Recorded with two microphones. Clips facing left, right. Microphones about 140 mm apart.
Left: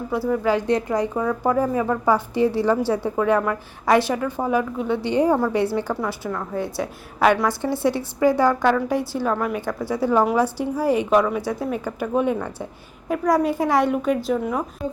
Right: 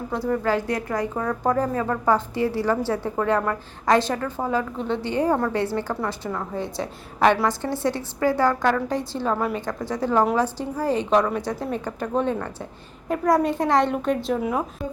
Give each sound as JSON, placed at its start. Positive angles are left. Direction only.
{"t": 0.1, "sound": "a woman's voice", "side_deg": 5}
{"t": 0.4, "sound": "a woman's voice", "side_deg": 15}
{"t": 1.2, "sound": "a woman's voice", "side_deg": 5}
{"t": 9.3, "sound": "a woman's voice", "side_deg": -5}
{"t": 9.6, "sound": "a woman's voice", "side_deg": 10}
{"t": 13.1, "sound": "a woman's voice", "side_deg": 0}